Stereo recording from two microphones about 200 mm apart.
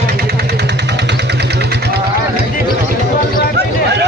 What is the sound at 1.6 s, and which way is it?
Vehicle, 55° right (ahead or behind).